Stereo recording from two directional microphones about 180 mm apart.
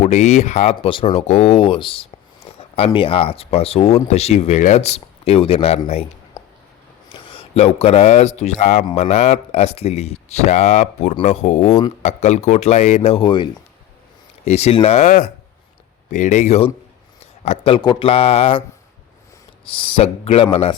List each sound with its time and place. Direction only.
0.0 s speech: 40° left (ahead or behind)
6.4 s a sound: 20° left (ahead or behind)
7.1 s speech: 30° left (ahead or behind)
19.7 s speech: 30° left (ahead or behind)